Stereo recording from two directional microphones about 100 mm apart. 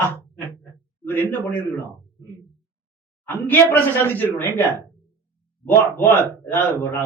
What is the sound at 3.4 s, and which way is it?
A man's voice, 15° left (ahead or behind).